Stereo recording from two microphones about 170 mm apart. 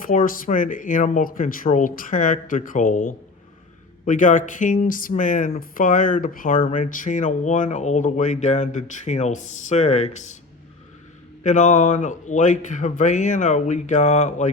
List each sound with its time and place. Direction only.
0.1 s speech: 55° left (ahead or behind)
11.4 s speech: 45° left (ahead or behind)